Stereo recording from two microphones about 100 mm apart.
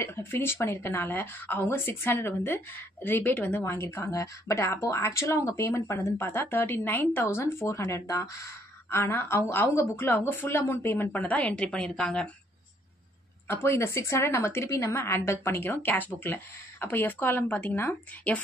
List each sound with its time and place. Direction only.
0.0 s speech: 25° left (ahead or behind)
13.5 s speech: 25° left (ahead or behind)